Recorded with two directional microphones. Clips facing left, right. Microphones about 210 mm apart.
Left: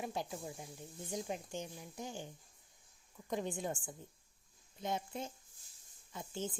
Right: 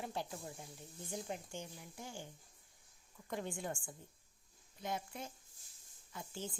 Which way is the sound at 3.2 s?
20° left (ahead or behind).